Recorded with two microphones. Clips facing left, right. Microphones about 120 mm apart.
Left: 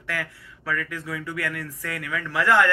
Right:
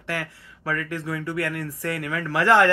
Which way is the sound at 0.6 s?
35° right (ahead or behind).